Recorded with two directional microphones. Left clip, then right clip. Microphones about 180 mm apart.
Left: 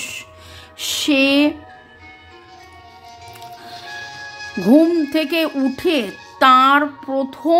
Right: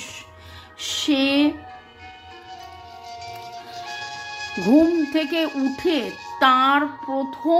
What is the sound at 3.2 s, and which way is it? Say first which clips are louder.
Music: left 2 dB; 15° right (ahead or behind).